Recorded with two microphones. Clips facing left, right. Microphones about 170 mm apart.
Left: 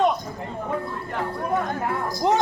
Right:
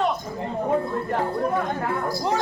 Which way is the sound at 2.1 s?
20° left (ahead or behind).